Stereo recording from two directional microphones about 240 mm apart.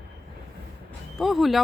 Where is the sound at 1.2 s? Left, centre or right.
Centre.